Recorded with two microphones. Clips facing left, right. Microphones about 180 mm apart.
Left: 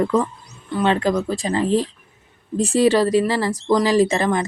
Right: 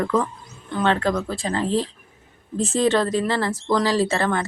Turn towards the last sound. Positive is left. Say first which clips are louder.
# left 4 dB
turn(degrees=15)  # may be behind; listen again after turning